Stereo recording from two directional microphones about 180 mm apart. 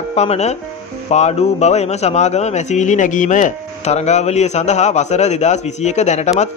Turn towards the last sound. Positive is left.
turn(degrees=40)  # may be behind; listen again after turning